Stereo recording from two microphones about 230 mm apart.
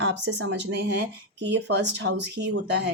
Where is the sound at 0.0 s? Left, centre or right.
Right.